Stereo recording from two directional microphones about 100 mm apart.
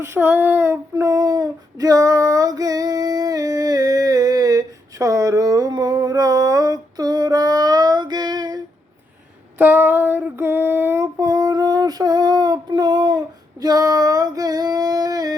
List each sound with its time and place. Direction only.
0.0 s child singing: 25° right (ahead or behind); by 8.6 s 45° right (ahead or behind)
9.6 s female singing: 20° right (ahead or behind); by 15.4 s 40° right (ahead or behind)